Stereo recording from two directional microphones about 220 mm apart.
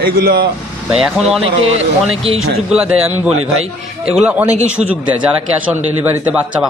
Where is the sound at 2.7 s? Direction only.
Centre (ahead or behind).